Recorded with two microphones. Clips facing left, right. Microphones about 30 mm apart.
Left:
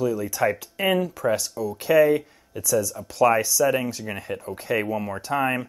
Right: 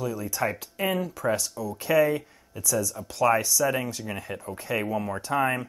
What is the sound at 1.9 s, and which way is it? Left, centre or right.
Speech, left.